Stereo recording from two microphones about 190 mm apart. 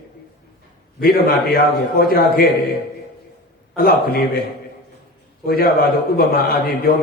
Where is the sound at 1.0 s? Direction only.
50° left (ahead or behind).